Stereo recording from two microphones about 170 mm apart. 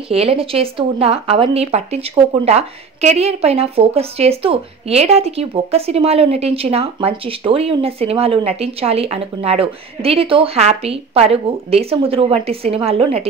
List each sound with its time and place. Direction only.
0.1 s speech: 35° right (ahead or behind)